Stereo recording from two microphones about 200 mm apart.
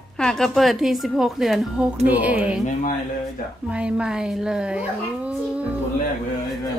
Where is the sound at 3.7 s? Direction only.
5° right (ahead or behind).